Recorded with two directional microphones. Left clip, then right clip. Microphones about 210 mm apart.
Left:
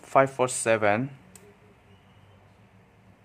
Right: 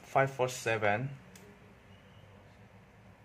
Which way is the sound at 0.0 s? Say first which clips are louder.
Left 8 dB; 30° left (ahead or behind).